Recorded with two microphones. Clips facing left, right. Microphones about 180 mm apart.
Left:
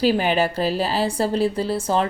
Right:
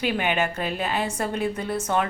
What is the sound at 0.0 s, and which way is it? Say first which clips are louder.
A woman's voice: left 5 dB; 35° left (ahead or behind).